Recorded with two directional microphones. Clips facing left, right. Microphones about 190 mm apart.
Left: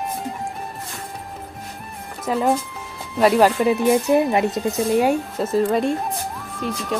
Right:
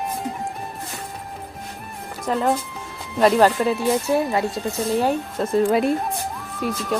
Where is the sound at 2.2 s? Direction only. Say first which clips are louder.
Left 1 dB; 5° left (ahead or behind).